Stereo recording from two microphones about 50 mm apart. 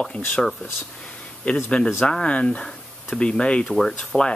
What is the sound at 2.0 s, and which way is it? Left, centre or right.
Speech, centre.